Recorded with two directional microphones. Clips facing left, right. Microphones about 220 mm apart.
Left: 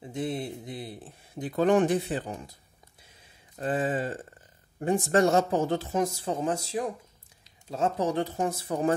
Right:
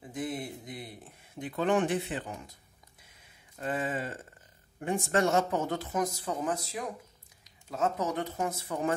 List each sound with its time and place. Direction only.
0.1 s speech: 30° left (ahead or behind)
3.5 s speech: 35° left (ahead or behind)